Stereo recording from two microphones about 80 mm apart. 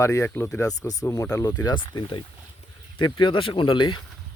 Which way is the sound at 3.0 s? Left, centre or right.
Left.